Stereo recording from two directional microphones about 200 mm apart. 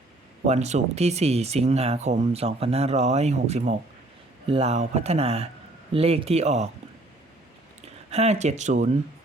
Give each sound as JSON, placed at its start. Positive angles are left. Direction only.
{"t": 0.4, "sound": "speech", "side_deg": -35}
{"t": 7.8, "sound": "speech", "side_deg": -35}